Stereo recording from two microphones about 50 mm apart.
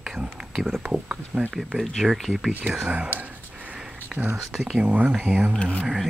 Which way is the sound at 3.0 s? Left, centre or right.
Right.